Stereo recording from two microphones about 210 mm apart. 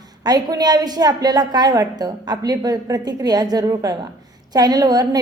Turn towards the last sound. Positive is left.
turn(degrees=-20)  # may be behind; listen again after turning